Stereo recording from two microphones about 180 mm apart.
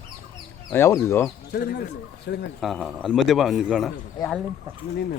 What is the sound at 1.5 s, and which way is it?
Speech, 65° left (ahead or behind).